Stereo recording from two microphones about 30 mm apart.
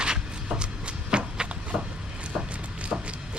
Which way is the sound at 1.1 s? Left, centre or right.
Right.